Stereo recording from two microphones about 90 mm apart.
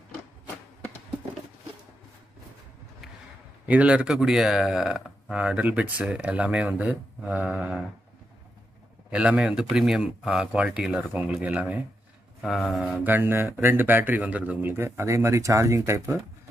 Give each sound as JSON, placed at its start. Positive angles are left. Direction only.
{"t": 3.6, "sound": "speech", "side_deg": -15}
{"t": 9.1, "sound": "speech", "side_deg": -10}
{"t": 12.4, "sound": "a sound", "side_deg": 0}
{"t": 12.9, "sound": "speech", "side_deg": -20}